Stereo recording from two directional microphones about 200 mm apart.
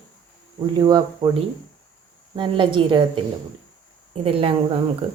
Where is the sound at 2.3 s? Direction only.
25° right (ahead or behind).